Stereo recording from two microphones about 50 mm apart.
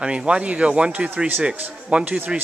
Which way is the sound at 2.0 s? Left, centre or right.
Right.